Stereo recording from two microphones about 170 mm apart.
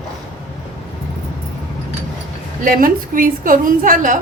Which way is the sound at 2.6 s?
55° right (ahead or behind).